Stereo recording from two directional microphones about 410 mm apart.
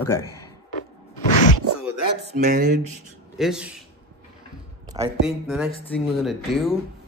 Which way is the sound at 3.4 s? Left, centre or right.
Centre.